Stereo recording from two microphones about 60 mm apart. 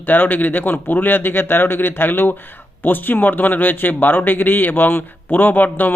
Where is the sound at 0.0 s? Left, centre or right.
Left.